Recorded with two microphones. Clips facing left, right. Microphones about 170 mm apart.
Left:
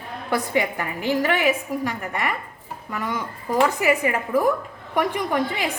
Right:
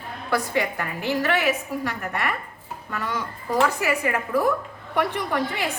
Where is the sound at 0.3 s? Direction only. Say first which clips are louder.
Left 1 dB; 15° left (ahead or behind).